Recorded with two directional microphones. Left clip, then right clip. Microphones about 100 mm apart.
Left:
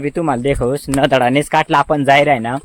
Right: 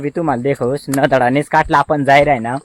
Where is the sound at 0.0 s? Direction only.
25° left (ahead or behind).